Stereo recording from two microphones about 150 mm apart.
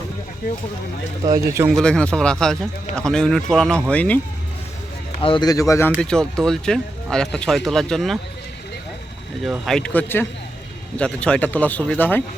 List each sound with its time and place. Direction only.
1.2 s speech: 25° right (ahead or behind)
1.7 s speech: 5° left (ahead or behind)
5.2 s a man's voice: 30° left (ahead or behind)
6.0 s speech: 5° left (ahead or behind)
9.4 s speech: centre (ahead or behind)